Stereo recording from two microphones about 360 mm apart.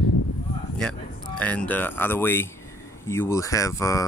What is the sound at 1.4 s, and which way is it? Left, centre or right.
Speech, centre.